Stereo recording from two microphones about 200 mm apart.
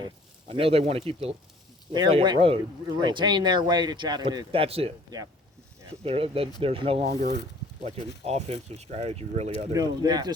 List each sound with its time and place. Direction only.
0.5 s speech: 30° right (ahead or behind)
9.7 s speech: 20° right (ahead or behind)